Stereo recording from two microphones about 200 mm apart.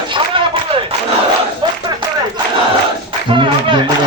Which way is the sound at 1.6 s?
25° right (ahead or behind).